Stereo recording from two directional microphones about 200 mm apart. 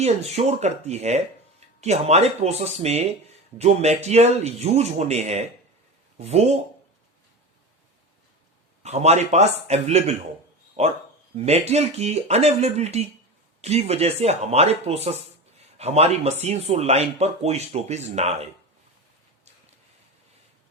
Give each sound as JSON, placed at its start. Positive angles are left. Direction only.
{"t": 0.0, "sound": "speech", "side_deg": -30}
{"t": 8.8, "sound": "speech", "side_deg": -35}